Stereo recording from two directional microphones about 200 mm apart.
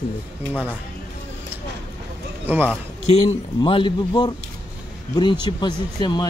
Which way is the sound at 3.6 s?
25° left (ahead or behind).